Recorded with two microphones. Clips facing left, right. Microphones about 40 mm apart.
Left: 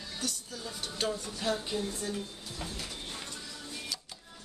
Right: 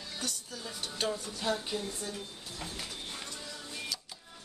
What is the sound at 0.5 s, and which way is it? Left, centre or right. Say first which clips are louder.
Speech: left 1 dB; centre.